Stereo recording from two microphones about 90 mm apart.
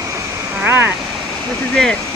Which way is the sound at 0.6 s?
25° right (ahead or behind).